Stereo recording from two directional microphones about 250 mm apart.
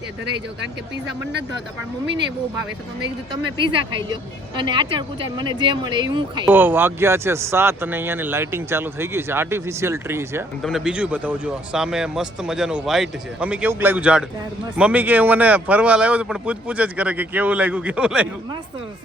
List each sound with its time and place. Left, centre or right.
3.6 s speech: centre